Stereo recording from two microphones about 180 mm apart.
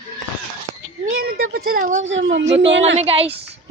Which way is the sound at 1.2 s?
55° right (ahead or behind).